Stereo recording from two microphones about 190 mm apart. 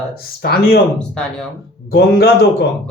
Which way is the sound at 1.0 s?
5° left (ahead or behind).